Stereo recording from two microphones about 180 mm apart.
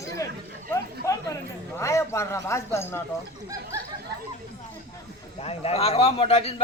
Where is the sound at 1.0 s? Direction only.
20° left (ahead or behind).